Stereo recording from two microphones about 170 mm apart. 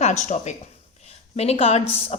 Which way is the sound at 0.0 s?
45° left (ahead or behind).